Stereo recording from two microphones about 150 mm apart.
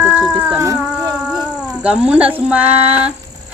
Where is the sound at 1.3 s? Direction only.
5° right (ahead or behind).